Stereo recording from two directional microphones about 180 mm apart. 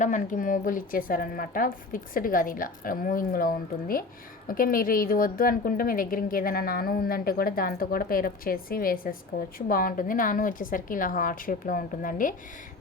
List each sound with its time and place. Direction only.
0.0 s a woman's voice: 45° left (ahead or behind)